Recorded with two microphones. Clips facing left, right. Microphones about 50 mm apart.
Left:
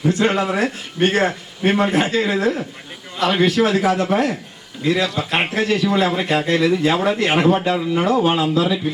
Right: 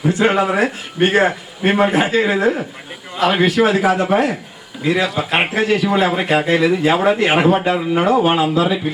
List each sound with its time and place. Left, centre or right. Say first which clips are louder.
0.0 s a man's voice: right 3 dB; centre